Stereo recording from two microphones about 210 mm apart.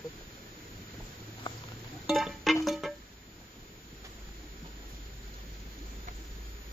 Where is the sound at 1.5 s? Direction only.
25° left (ahead or behind).